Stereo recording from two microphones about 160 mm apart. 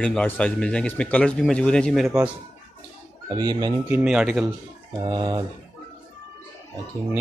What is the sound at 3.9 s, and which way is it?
Speech, 5° right (ahead or behind).